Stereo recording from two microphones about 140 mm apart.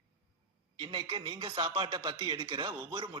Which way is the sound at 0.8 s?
35° right (ahead or behind).